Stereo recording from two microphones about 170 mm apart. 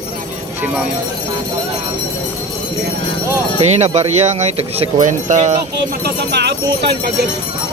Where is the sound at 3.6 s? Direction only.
40° right (ahead or behind).